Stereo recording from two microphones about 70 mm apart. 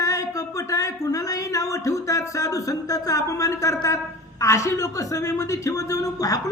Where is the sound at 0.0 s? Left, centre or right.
Left.